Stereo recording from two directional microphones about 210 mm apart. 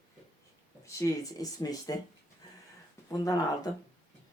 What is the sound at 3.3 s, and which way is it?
Speech, 15° left (ahead or behind).